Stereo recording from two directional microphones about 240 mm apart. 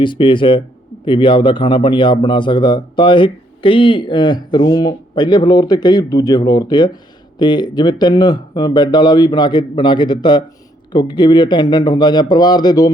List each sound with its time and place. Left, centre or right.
0.0 s a man's voice: centre